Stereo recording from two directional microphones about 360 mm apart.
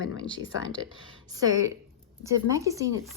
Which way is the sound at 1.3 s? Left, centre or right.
Centre.